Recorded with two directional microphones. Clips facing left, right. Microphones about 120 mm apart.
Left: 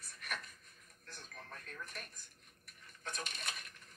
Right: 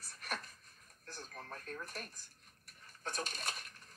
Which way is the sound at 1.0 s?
35° right (ahead or behind).